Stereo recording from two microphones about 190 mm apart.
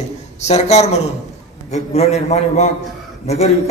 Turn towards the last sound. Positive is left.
turn(degrees=35)  # may be behind; listen again after turning